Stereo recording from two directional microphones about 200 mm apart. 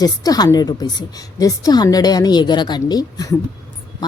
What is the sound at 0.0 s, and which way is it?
Speech, 20° left (ahead or behind).